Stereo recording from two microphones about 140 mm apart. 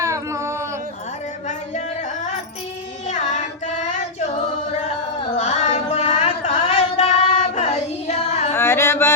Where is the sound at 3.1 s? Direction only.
55° left (ahead or behind).